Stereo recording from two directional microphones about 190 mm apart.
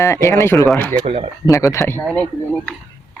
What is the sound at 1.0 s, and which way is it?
Speech, 30° right (ahead or behind).